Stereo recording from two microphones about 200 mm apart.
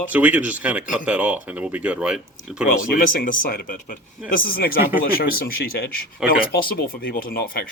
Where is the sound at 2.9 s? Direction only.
45° left (ahead or behind).